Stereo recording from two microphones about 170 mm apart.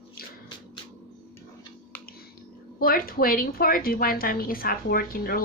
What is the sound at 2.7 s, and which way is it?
A woman's voice, 60° left (ahead or behind).